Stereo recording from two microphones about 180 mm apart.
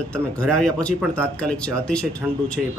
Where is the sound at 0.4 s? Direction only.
5° left (ahead or behind).